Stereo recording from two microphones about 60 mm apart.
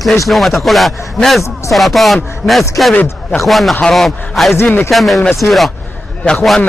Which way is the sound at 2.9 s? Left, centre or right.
Left.